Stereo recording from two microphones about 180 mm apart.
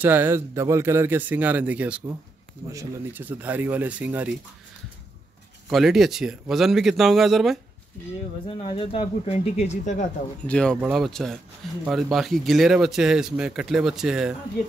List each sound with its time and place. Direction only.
0.0 s speech: 10° right (ahead or behind)
5.7 s speech: centre (ahead or behind)
8.7 s speech: 35° left (ahead or behind)
10.4 s speech: 5° left (ahead or behind)